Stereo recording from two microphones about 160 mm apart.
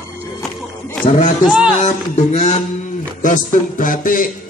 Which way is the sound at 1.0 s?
50° left (ahead or behind).